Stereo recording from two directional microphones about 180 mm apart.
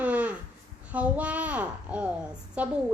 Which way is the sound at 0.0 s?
10° right (ahead or behind).